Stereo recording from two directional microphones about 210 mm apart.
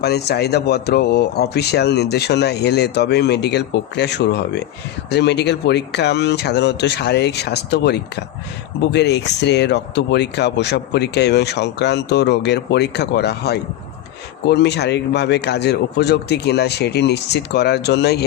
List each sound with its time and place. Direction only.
0.0 s speech: 50° left (ahead or behind)